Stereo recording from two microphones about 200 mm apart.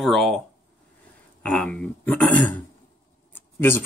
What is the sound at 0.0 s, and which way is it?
Speech, centre (ahead or behind).